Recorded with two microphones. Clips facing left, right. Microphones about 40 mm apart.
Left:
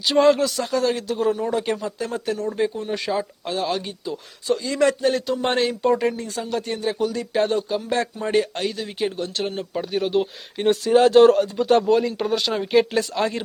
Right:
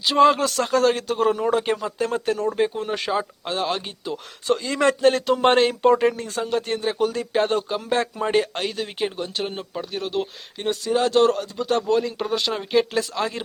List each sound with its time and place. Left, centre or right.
0.0 s speech: centre
0.3 s speech: right
1.5 s speech: centre
2.0 s speech: right
2.7 s speech: right
3.1 s speech: right
3.5 s speech: right
9.0 s speech: centre
9.6 s speech: centre